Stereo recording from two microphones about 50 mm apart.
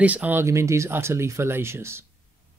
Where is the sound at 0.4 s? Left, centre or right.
Right.